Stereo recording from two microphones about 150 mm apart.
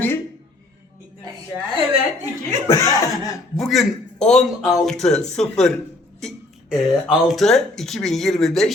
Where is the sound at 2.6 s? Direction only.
20° left (ahead or behind).